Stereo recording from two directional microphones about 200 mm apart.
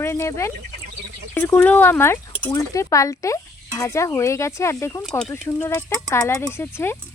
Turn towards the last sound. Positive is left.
turn(degrees=10)  # may be behind; listen again after turning